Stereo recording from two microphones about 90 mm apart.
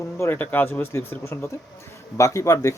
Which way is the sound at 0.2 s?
20° left (ahead or behind).